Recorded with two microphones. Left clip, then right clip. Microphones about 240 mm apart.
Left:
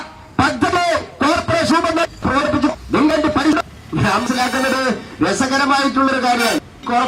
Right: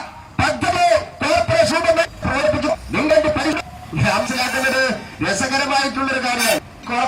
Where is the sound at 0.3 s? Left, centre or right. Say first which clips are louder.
Left 2 dB; left.